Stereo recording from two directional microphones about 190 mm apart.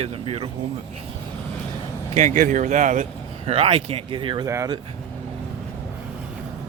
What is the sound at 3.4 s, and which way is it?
Speech, 30° right (ahead or behind).